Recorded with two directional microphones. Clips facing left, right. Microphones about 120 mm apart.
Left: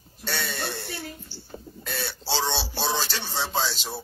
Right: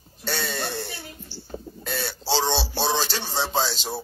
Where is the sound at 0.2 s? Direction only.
35° right (ahead or behind).